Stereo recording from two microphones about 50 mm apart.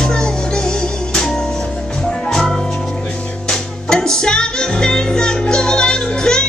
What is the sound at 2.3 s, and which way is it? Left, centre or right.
Music, centre.